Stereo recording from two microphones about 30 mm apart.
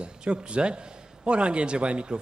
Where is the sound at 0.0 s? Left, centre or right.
Right.